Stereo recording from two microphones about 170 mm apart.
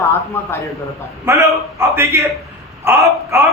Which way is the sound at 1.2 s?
15° right (ahead or behind).